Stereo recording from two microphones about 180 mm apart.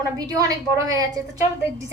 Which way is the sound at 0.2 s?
20° right (ahead or behind).